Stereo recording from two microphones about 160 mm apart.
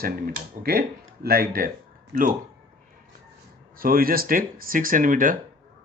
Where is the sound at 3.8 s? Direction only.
65° right (ahead or behind).